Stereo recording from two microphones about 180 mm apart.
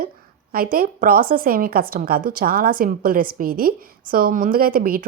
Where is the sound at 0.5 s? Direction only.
55° right (ahead or behind).